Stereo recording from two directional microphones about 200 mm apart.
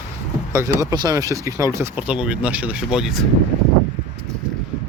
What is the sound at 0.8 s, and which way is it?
Speech, 15° right (ahead or behind).